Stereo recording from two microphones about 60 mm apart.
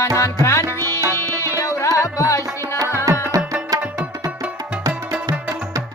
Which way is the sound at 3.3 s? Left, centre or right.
Right.